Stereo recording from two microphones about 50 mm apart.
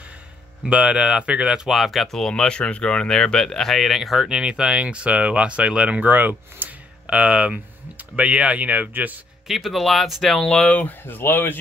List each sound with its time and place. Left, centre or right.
0.7 s speech: centre
1.7 s speech: centre
4.3 s speech: centre; by 6.7 s right
7.1 s speech: right
9.5 s speech: centre
10.7 s speech: left